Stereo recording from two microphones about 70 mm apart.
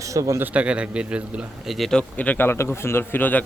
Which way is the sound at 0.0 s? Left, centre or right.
Right.